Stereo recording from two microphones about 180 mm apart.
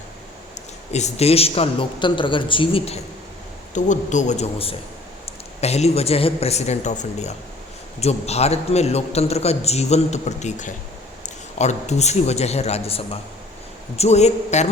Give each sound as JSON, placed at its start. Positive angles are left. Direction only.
{"t": 0.9, "sound": "a man's voice", "side_deg": 35}
{"t": 3.8, "sound": "a man's voice", "side_deg": 45}